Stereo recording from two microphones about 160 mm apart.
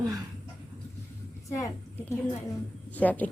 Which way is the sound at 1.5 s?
20° left (ahead or behind).